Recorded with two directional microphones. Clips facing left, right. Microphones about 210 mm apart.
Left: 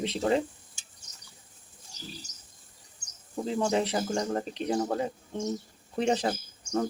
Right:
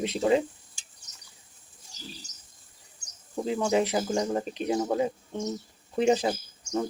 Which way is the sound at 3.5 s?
5° right (ahead or behind).